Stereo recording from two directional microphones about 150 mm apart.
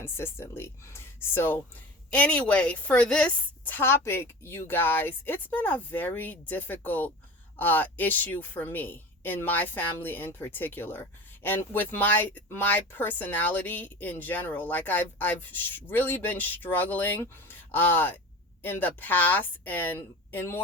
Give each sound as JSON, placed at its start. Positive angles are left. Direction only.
{"t": 0.0, "sound": "a woman's voice", "side_deg": 15}